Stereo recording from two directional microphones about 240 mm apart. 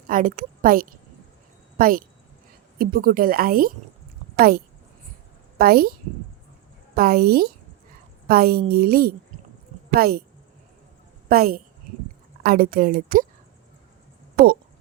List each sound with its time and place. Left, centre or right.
0.1 s a woman's voice: right
11.3 s speech: right